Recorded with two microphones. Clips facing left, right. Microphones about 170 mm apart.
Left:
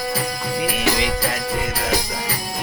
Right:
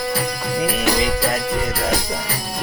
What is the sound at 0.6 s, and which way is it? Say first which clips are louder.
Music: right 2 dB; 40° right (ahead or behind).